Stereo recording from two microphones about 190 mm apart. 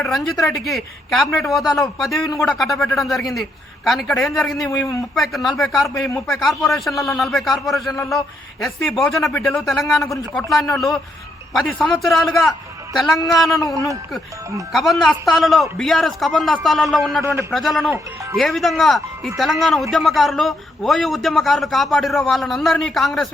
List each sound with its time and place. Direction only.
0.0 s a man's voice: centre (ahead or behind)
1.6 s a man's voice: 20° left (ahead or behind)
2.0 s a man's voice: centre (ahead or behind)
14.7 s a man's voice: centre (ahead or behind)